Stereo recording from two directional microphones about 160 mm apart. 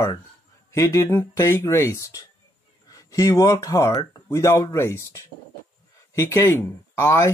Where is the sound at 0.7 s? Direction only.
15° left (ahead or behind).